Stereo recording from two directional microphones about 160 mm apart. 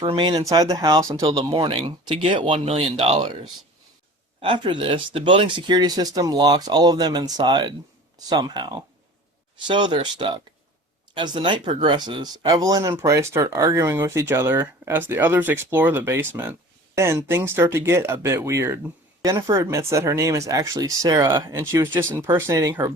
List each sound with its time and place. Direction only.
0.0 s speech: 30° right (ahead or behind)
4.4 s speech: 30° right (ahead or behind)